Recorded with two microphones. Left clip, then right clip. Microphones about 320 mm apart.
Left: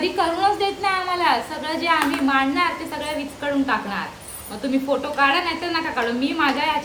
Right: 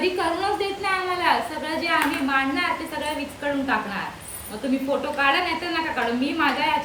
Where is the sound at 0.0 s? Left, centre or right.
Centre.